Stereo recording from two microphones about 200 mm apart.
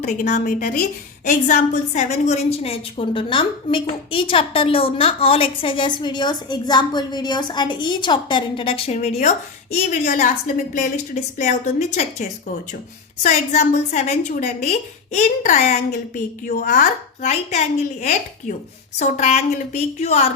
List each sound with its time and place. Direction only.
0.0 s a woman's voice: 35° left (ahead or behind)